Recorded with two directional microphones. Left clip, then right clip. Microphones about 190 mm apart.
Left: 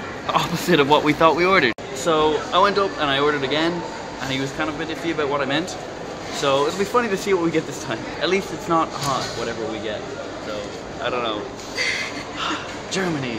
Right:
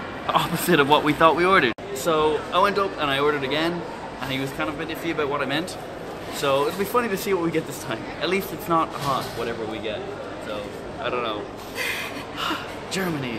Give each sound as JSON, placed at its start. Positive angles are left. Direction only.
{"t": 0.3, "sound": "speech", "side_deg": 0}
{"t": 11.1, "sound": "speech", "side_deg": 10}
{"t": 11.8, "sound": "a sound", "side_deg": -15}
{"t": 12.4, "sound": "speech", "side_deg": 10}